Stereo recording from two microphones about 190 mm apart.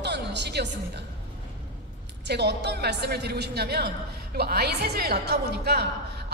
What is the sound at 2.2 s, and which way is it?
A woman's voice, 60° right (ahead or behind).